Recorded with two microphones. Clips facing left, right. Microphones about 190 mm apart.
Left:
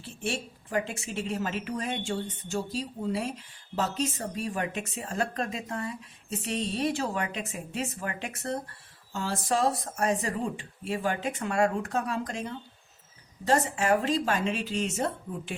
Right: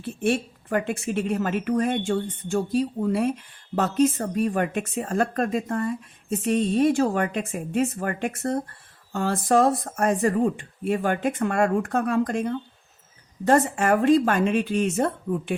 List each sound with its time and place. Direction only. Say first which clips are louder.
0.0 s speech: right 9 dB; 55° right (ahead or behind)